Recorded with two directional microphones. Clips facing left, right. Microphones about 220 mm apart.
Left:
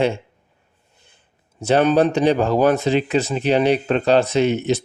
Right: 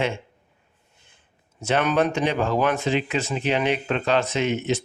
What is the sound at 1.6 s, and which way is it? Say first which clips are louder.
Speech: left 6 dB; 35° left (ahead or behind).